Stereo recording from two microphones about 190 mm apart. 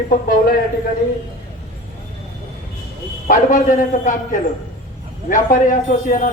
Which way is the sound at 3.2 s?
45° left (ahead or behind).